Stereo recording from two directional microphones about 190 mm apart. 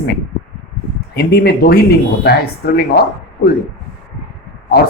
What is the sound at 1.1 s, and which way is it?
Speech, 55° left (ahead or behind).